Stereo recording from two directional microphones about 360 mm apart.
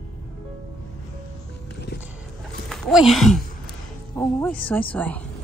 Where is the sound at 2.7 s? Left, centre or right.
Centre.